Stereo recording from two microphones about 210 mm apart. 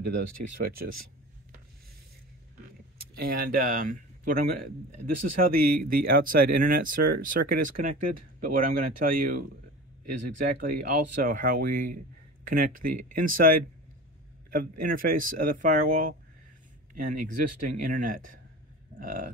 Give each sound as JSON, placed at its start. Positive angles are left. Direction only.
{"t": 0.0, "sound": "speech", "side_deg": -45}
{"t": 3.0, "sound": "speech", "side_deg": -45}